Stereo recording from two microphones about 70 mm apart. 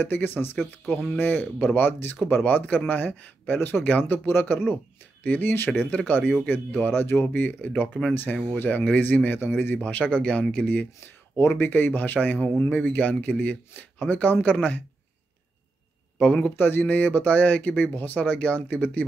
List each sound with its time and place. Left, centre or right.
0.0 s a man's voice: left
11.3 s speech: left
16.2 s speech: centre
16.5 s speech: left